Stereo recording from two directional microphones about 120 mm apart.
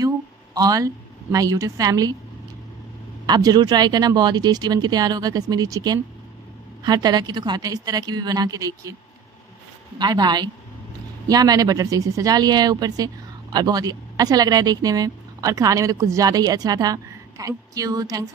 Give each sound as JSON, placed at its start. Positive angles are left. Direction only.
{"t": 0.6, "sound": "speech", "side_deg": -30}
{"t": 3.3, "sound": "speech", "side_deg": -35}
{"t": 9.9, "sound": "speech", "side_deg": -35}